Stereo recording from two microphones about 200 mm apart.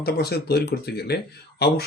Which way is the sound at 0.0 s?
55° left (ahead or behind).